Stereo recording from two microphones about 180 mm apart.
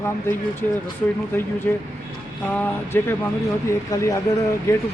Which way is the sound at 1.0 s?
5° left (ahead or behind).